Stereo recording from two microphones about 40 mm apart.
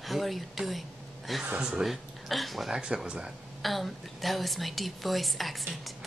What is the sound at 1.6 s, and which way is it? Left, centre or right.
Speech, right.